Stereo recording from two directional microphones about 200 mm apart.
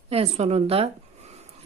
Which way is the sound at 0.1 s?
30° right (ahead or behind).